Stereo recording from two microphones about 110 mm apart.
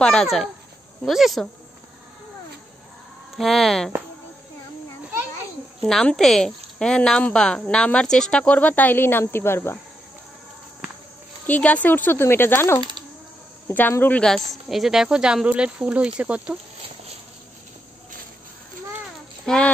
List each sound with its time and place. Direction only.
0.0 s speech: 5° left (ahead or behind)
3.3 s speech: centre (ahead or behind)
5.8 s a woman's voice: 5° left (ahead or behind); by 9.8 s 20° left (ahead or behind)
11.4 s a woman's voice: 15° left (ahead or behind)
14.2 s speech: 5° left (ahead or behind)
19.4 s speech: 10° left (ahead or behind)